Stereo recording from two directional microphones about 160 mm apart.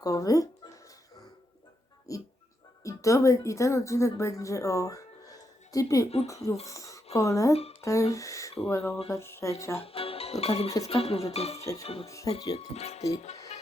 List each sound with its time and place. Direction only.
0.0 s speech: 20° left (ahead or behind)
2.1 s a woman's voice: 20° left (ahead or behind)
7.8 s a sound: 20° left (ahead or behind)
8.1 s speech: 20° left (ahead or behind)
8.7 s music: 15° left (ahead or behind)
9.7 s speech: 35° left (ahead or behind)
11.6 s speech: 20° left (ahead or behind)
12.5 s speech: 40° left (ahead or behind)